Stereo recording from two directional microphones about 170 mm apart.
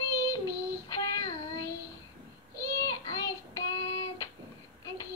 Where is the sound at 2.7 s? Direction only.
20° left (ahead or behind).